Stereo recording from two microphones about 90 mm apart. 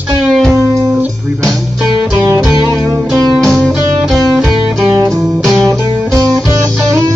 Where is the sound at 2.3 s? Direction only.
45° right (ahead or behind).